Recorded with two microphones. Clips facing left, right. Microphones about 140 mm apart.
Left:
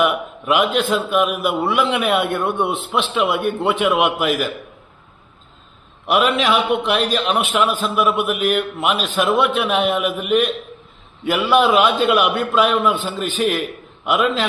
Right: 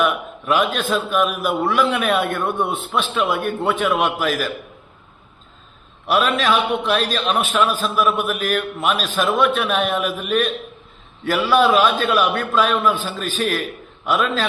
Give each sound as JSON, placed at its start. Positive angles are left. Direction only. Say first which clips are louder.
{"t": 0.0, "sound": "a man's voice", "louder": "left 2 dB", "side_deg": 15}
{"t": 6.1, "sound": "a man's voice", "louder": "left 1 dB", "side_deg": 20}